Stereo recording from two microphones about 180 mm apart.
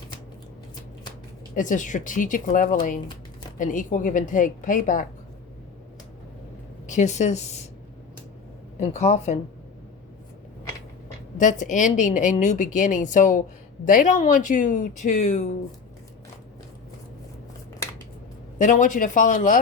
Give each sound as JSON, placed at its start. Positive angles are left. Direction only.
{"t": 1.5, "sound": "a woman's voice", "side_deg": 45}
{"t": 6.8, "sound": "speech", "side_deg": 40}
{"t": 8.8, "sound": "speech", "side_deg": 40}
{"t": 11.6, "sound": "a woman's voice", "side_deg": 45}
{"t": 18.6, "sound": "a woman's voice", "side_deg": 45}